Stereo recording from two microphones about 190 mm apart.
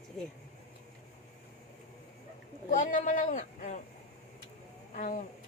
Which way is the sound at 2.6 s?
40° left (ahead or behind).